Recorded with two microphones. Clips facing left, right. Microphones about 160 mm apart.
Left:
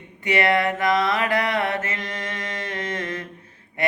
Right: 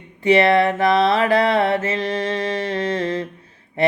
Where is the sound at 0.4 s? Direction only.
30° right (ahead or behind).